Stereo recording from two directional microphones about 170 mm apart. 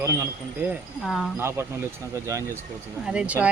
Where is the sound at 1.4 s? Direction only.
15° right (ahead or behind).